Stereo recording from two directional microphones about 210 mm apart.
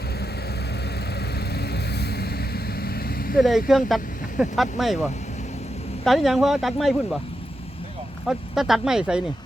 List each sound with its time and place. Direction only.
1.5 s vehicle: 50° left (ahead or behind)
3.7 s speech: centre (ahead or behind)
6.1 s speech: centre (ahead or behind)
8.3 s speech: centre (ahead or behind)